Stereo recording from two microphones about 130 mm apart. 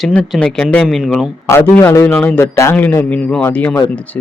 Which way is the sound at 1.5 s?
20° left (ahead or behind).